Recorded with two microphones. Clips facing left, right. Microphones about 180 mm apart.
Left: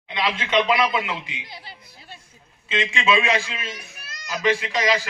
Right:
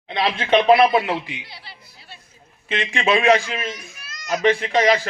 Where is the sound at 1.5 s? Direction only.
45° left (ahead or behind).